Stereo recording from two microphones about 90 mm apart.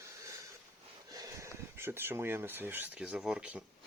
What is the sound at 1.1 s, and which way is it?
Speech, 40° right (ahead or behind).